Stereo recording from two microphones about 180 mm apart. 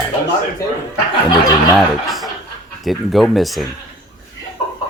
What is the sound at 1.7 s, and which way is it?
Speech, centre (ahead or behind).